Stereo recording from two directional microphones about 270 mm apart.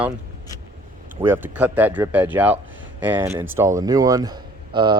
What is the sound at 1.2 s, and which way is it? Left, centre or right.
Speech, centre.